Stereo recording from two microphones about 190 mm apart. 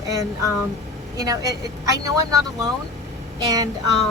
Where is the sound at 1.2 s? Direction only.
20° right (ahead or behind).